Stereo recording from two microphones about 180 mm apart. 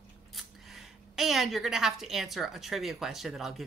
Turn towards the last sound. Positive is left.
turn(degrees=0)  # may be behind; listen again after turning